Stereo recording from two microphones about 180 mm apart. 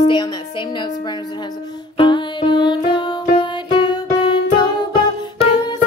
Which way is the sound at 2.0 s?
25° left (ahead or behind).